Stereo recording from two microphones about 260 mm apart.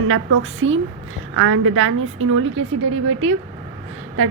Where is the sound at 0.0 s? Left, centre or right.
Right.